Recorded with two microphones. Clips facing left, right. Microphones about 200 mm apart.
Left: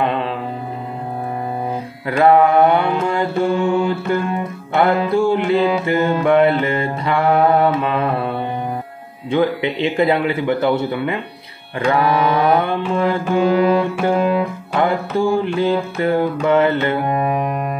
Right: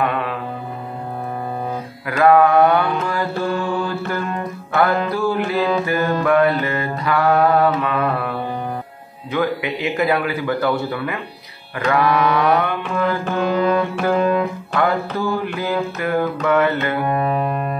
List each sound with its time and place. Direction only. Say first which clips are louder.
0.0 s mantra: left 2 dB; 25° left (ahead or behind)
2.0 s mantra: left 1 dB; 30° left (ahead or behind)
13.4 s music: left 4 dB; 10° left (ahead or behind)
13.7 s mantra: left 1 dB; 25° left (ahead or behind)
14.2 s music: even; 10° left (ahead or behind)
14.8 s mantra: left 3 dB; 25° left (ahead or behind)
16.4 s music: left 3 dB; 30° left (ahead or behind)